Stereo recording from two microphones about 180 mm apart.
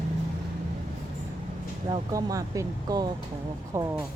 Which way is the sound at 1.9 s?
20° right (ahead or behind).